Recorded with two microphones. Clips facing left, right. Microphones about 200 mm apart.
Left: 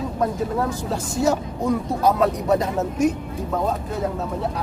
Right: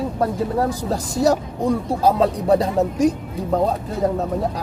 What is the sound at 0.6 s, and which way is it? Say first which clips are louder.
Speech: right 3 dB; 35° right (ahead or behind).